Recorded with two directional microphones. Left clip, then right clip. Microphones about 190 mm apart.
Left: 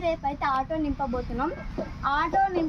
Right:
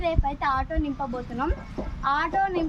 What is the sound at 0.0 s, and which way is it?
Speech, 30° left (ahead or behind).